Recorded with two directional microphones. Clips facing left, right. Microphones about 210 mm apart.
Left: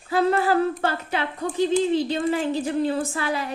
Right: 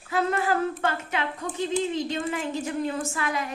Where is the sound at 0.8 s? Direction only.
35° left (ahead or behind).